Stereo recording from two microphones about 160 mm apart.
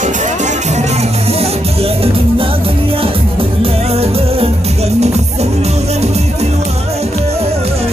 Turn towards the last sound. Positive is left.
turn(degrees=-40)  # may be behind; listen again after turning